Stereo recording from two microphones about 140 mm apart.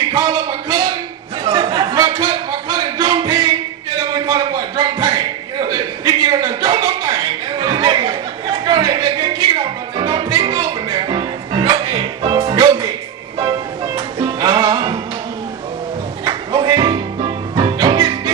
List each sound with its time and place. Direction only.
0.1 s speech: 30° right (ahead or behind)
1.4 s a sound: 35° right (ahead or behind)
3.1 s music: 35° right (ahead or behind)
4.1 s a sound: 35° right (ahead or behind)
7.0 s chuckle: 35° right (ahead or behind)
8.6 s a sound: 35° right (ahead or behind)
9.9 s music: 35° right (ahead or behind)
14.4 s music: 30° right (ahead or behind)
16.3 s music: 35° right (ahead or behind)